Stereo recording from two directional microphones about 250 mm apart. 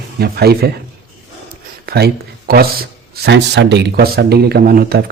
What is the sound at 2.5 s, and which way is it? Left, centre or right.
Speech, right.